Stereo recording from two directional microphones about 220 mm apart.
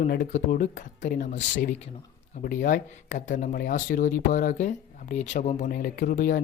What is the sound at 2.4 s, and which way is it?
Speech, 40° left (ahead or behind).